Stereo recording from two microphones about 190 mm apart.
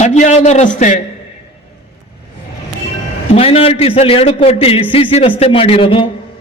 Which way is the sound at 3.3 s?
30° left (ahead or behind).